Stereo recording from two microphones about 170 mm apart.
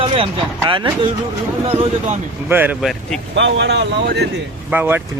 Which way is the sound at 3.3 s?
90° right.